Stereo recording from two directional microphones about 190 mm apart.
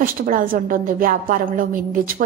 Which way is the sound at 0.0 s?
45° right (ahead or behind).